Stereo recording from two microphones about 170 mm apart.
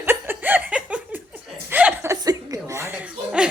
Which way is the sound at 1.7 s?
10° right (ahead or behind).